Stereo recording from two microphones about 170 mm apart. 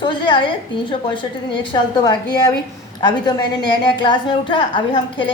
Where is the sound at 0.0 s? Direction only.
25° left (ahead or behind).